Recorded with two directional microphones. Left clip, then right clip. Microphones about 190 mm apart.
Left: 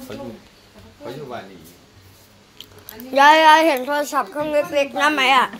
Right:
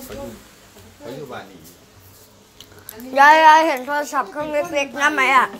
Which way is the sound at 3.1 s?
15° left (ahead or behind).